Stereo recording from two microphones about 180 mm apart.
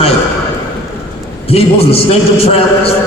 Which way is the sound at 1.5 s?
35° left (ahead or behind).